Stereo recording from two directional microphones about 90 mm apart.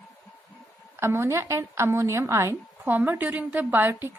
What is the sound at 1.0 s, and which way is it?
A woman's voice, 30° right (ahead or behind).